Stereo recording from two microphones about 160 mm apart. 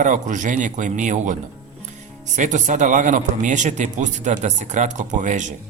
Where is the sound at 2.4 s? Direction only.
50° right (ahead or behind).